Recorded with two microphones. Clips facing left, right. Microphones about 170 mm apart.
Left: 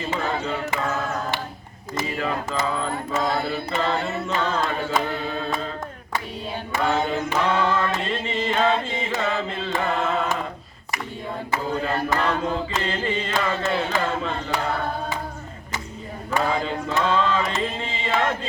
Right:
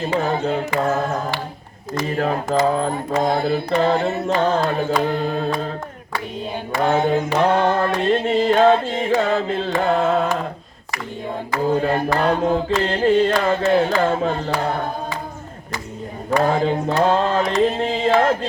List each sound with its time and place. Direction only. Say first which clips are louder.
0.4 s music: right 6 dB; 45° right (ahead or behind)
2.0 s mantra: right 7 dB; 45° right (ahead or behind)
6.8 s mantra: right 6 dB; 50° right (ahead or behind)
11.7 s mantra: right 6 dB; 45° right (ahead or behind)
16.3 s mantra: right 6 dB; 45° right (ahead or behind)
17.6 s music: right 10 dB; 50° right (ahead or behind)